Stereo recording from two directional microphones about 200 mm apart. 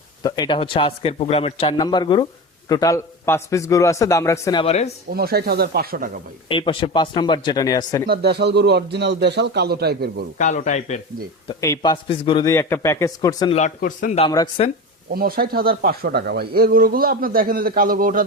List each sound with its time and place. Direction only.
0.2 s a man's voice: 20° left (ahead or behind)
4.6 s speech: 30° left (ahead or behind)
5.1 s speech: 50° right (ahead or behind)
6.5 s a man's voice: 25° left (ahead or behind)
8.0 s a man's voice: 55° right (ahead or behind)
10.3 s speech: 40° left (ahead or behind)
11.6 s a man's voice: 15° left (ahead or behind)
12.5 s a man's voice: 15° left (ahead or behind)
13.5 s speech: 35° left (ahead or behind)
14.3 s a man's voice: 20° left (ahead or behind)
15.1 s speech: 50° right (ahead or behind)